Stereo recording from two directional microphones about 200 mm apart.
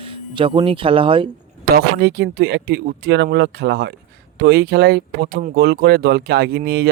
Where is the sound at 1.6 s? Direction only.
50° right (ahead or behind).